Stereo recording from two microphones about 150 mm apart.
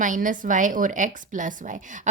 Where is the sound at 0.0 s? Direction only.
60° right (ahead or behind).